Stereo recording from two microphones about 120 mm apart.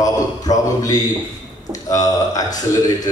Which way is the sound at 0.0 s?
30° left (ahead or behind).